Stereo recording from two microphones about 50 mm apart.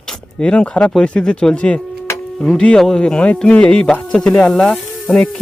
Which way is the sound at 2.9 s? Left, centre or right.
Left.